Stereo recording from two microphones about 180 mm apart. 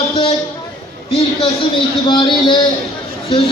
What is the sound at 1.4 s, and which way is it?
Speech, 25° left (ahead or behind).